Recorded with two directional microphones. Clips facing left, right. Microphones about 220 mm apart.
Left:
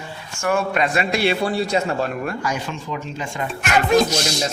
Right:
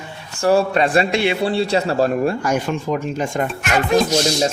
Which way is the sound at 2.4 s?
50° right (ahead or behind).